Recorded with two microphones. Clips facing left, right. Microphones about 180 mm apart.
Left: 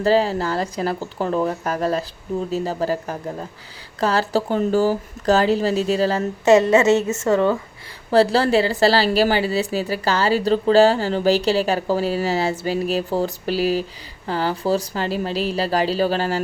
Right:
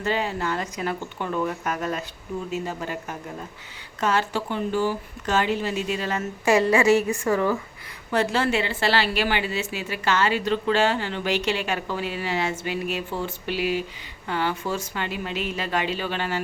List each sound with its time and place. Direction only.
0.0 s a woman's voice: 35° left (ahead or behind)
6.4 s a woman's voice: 25° left (ahead or behind)
8.1 s a woman's voice: 35° left (ahead or behind)